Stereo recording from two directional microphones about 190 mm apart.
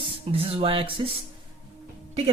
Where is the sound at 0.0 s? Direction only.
30° right (ahead or behind).